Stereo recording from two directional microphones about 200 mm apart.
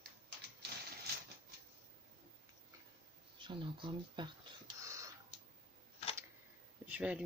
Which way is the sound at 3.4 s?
25° right (ahead or behind).